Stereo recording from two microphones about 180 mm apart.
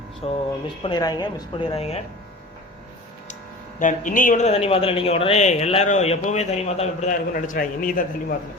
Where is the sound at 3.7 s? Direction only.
45° left (ahead or behind).